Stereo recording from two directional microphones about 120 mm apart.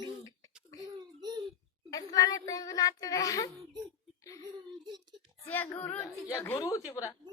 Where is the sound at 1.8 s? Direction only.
30° left (ahead or behind).